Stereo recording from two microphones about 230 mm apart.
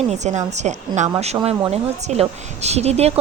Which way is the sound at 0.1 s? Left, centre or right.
Right.